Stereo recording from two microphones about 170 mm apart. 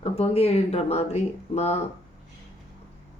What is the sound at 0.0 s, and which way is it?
Speech, 35° left (ahead or behind).